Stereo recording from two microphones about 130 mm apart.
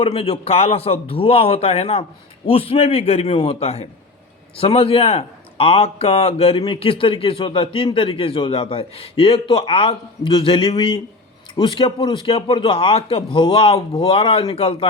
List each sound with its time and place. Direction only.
0.0 s a man's voice: 50° left (ahead or behind)